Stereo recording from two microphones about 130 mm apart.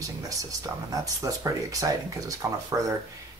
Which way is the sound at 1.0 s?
25° right (ahead or behind).